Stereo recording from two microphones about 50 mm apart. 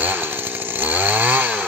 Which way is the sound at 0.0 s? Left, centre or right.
Right.